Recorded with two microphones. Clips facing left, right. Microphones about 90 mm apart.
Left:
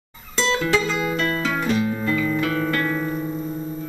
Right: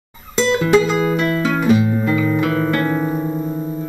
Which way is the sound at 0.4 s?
20° right (ahead or behind).